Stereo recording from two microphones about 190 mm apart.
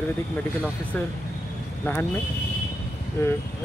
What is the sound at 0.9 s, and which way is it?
Speech, 5° left (ahead or behind).